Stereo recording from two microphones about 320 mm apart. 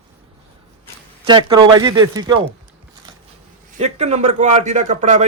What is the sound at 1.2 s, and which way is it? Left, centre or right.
Speech, centre.